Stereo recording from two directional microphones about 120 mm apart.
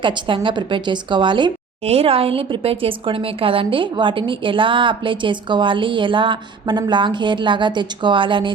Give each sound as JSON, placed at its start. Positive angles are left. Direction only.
{"t": 0.0, "sound": "a woman's voice", "side_deg": -45}
{"t": 1.8, "sound": "a woman's voice", "side_deg": -60}